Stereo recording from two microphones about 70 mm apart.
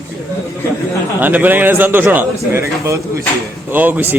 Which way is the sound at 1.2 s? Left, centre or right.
Right.